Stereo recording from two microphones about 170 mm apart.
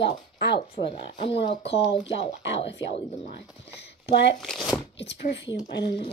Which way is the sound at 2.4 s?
90° left.